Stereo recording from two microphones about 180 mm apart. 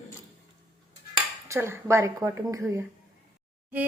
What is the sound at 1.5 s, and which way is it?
A woman's voice, 15° right (ahead or behind).